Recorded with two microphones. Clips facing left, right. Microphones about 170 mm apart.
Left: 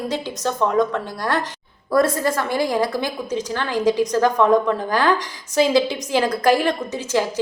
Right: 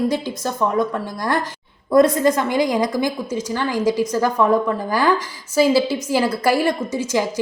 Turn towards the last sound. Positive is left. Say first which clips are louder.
# right 1 dB
turn(degrees=-10)  # may be behind; listen again after turning